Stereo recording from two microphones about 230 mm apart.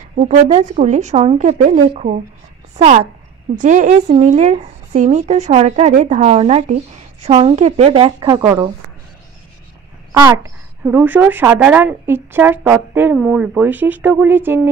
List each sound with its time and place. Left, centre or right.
0.1 s speech: right; by 8.6 s centre
10.1 s a woman's voice: centre